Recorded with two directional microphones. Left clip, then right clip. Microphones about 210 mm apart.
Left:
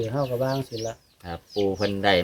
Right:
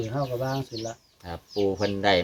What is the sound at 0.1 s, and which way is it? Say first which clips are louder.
Speech: left 3 dB; 40° left (ahead or behind).